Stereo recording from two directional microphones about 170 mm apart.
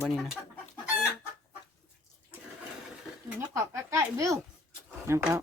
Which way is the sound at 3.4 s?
20° right (ahead or behind).